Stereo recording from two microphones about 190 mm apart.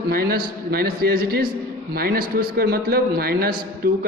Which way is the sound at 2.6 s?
55° right (ahead or behind).